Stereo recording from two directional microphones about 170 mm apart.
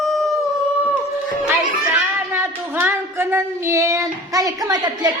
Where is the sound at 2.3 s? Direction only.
15° right (ahead or behind).